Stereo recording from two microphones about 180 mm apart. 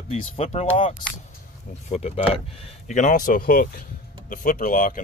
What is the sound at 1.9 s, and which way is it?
Speech, 35° left (ahead or behind).